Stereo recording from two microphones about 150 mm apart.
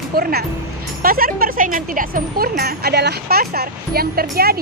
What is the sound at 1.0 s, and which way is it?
Speech, 75° right (ahead or behind).